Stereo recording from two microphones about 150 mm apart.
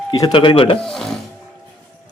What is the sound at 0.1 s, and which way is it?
Speech, 30° left (ahead or behind).